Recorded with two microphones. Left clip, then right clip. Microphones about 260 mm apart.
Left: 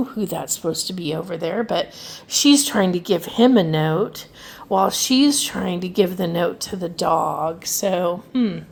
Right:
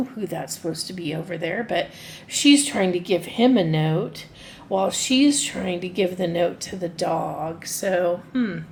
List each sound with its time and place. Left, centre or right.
0.3 s speech: left